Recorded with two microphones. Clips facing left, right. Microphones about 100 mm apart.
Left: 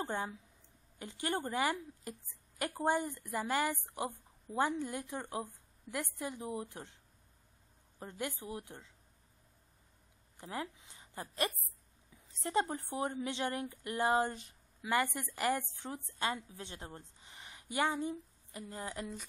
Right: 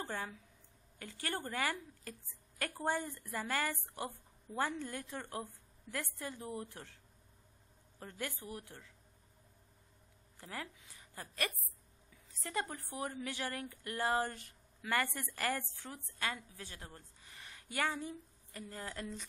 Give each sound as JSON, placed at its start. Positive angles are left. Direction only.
{"t": 0.0, "sound": "a woman's voice", "side_deg": 20}
{"t": 8.0, "sound": "a woman's voice", "side_deg": 20}
{"t": 10.3, "sound": "a woman's voice", "side_deg": 20}